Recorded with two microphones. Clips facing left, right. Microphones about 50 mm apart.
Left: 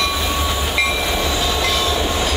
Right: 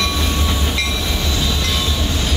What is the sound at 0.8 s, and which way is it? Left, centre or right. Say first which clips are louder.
Train: left 3 dB; centre.